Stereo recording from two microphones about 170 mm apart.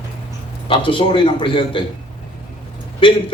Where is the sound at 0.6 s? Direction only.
30° left (ahead or behind).